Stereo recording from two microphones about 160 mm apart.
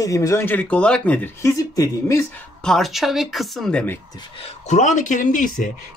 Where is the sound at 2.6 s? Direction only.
Centre (ahead or behind).